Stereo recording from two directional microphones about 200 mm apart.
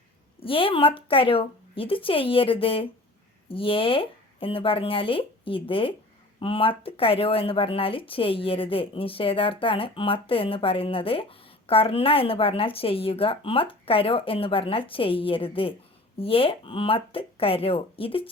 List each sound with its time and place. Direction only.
0.3 s speech: 25° left (ahead or behind)